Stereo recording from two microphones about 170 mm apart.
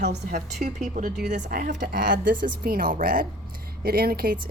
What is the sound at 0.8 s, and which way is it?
A woman's voice, 45° right (ahead or behind).